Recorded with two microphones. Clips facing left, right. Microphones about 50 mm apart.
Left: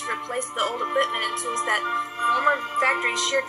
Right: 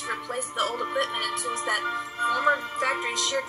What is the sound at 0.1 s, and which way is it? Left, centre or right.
A woman's voice, left.